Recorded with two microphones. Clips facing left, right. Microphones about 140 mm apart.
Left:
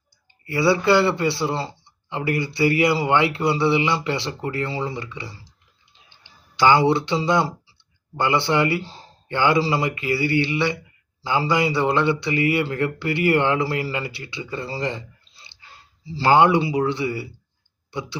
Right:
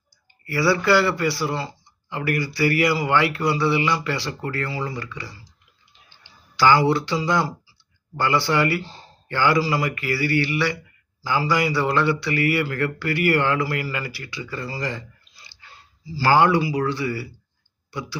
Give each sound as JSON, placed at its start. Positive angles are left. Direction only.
{"t": 0.4, "sound": "speech", "side_deg": 25}